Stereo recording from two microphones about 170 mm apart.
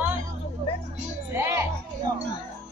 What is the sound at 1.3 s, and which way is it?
Music, 15° right (ahead or behind).